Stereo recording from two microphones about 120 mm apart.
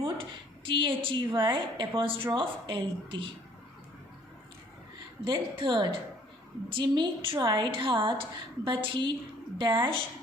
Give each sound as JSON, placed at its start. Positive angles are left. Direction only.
{"t": 0.0, "sound": "a woman's voice", "side_deg": -45}
{"t": 5.2, "sound": "a woman's voice", "side_deg": -40}